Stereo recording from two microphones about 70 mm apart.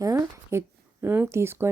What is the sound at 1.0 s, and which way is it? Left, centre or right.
Speech, right.